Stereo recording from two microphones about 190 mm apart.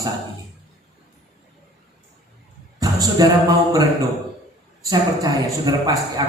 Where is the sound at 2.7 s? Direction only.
20° right (ahead or behind).